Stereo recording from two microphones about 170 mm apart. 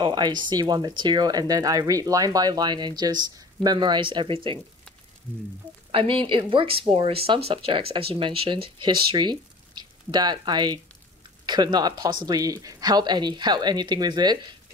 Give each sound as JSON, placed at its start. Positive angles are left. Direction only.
{"t": 0.0, "sound": "speech", "side_deg": -25}
{"t": 5.9, "sound": "speech", "side_deg": -35}